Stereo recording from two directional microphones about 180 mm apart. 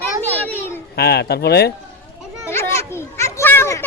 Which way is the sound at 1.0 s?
65° left (ahead or behind).